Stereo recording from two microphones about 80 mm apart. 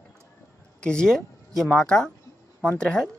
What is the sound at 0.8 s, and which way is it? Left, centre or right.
A woman's voice, centre.